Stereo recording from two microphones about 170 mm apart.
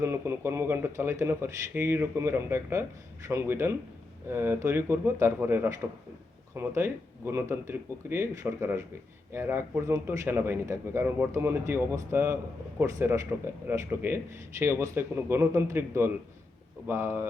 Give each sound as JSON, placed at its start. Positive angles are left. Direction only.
{"t": 0.0, "sound": "a man's voice", "side_deg": -15}